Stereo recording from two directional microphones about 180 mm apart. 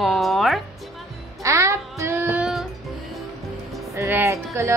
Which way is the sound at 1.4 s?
15° right (ahead or behind).